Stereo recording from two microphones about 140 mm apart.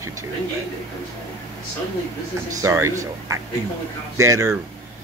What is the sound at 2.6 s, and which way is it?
Speech, 20° right (ahead or behind).